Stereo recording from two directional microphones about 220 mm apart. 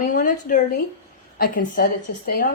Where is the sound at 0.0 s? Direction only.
35° left (ahead or behind).